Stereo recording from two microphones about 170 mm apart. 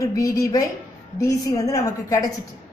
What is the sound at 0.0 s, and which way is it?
Speech, 20° left (ahead or behind).